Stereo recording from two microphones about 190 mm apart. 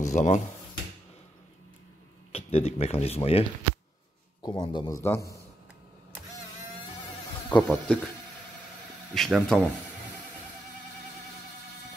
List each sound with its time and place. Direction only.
0.0 s speech: 40° left (ahead or behind)
2.3 s a man's voice: 30° left (ahead or behind); by 5.3 s 15° left (ahead or behind)
7.4 s a man's voice: 10° left (ahead or behind)
9.1 s speech: centre (ahead or behind)